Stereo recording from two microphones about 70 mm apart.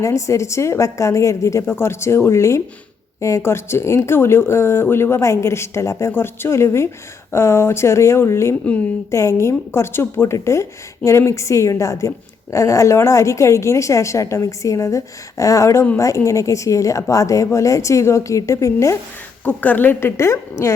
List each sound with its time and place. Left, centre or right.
0.0 s a woman's voice: left
1.6 s a woman's voice: left
19.5 s speech: left